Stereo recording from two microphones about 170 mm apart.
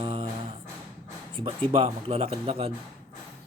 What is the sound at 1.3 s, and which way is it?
Speech, 30° right (ahead or behind).